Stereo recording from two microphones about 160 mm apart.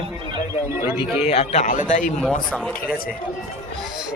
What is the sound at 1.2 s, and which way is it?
Speech, 45° left (ahead or behind).